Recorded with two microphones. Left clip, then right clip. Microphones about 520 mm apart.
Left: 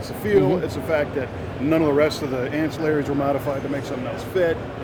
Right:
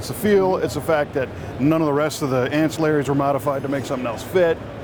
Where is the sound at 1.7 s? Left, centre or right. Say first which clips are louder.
Left 2 dB; right.